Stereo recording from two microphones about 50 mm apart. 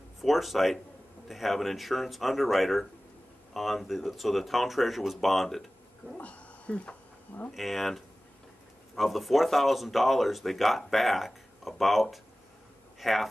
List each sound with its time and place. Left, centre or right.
0.2 s speech: centre
6.2 s speech: left
7.5 s speech: centre